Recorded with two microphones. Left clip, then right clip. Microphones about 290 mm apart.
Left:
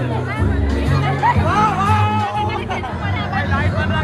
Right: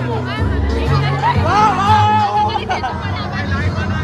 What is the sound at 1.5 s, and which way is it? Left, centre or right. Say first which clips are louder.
Music: right 4 dB; right.